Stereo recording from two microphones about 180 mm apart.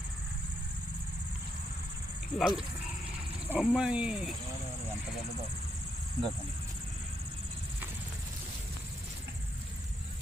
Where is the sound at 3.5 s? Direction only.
5° right (ahead or behind).